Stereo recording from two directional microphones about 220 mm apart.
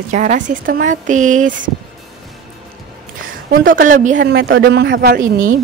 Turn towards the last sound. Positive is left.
turn(degrees=-40)  # may be behind; listen again after turning